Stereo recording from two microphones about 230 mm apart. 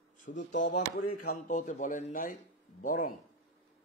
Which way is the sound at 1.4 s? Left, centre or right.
Left.